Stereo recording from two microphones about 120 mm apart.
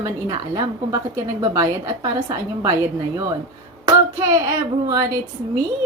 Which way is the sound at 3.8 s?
30° right (ahead or behind).